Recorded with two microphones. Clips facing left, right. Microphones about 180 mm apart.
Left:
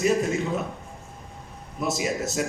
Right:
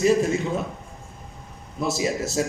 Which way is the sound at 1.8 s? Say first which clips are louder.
Right 2 dB; 30° right (ahead or behind).